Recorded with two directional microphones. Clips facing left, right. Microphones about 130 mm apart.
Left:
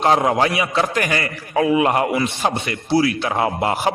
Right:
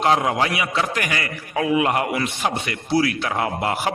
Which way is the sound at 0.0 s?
35° left (ahead or behind).